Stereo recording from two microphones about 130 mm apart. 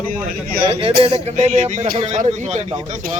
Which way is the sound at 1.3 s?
65° right (ahead or behind).